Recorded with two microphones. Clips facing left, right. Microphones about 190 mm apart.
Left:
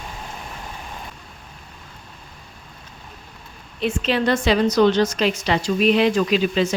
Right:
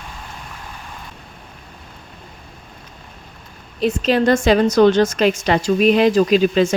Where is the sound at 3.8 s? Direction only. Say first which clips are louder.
Right 5 dB; 40° right (ahead or behind).